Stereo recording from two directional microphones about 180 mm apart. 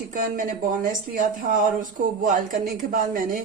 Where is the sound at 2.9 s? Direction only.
45° right (ahead or behind).